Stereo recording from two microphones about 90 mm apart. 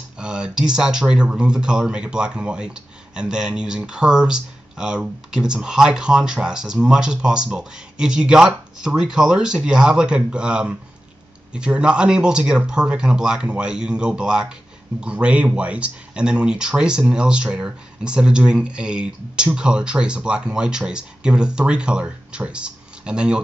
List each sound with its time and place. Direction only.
0.2 s speech: 10° right (ahead or behind)